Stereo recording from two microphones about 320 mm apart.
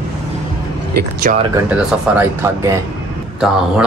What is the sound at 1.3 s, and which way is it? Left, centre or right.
Speech, right.